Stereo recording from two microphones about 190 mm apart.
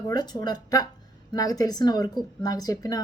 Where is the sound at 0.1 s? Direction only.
20° left (ahead or behind).